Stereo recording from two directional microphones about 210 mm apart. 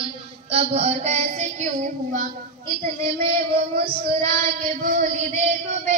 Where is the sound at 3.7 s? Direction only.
45° right (ahead or behind).